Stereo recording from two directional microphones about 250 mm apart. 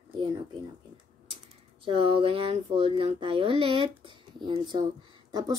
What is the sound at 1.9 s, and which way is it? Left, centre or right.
Speech, right.